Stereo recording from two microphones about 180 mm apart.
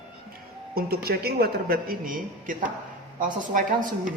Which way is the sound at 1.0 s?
60° right (ahead or behind).